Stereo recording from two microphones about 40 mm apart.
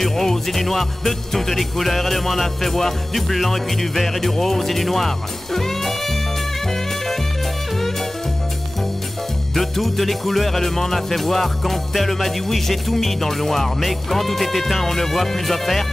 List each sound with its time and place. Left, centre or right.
0.0 s music: centre
9.6 s music: centre